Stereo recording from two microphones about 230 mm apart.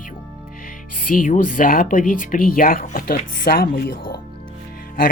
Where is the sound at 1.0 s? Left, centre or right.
Left.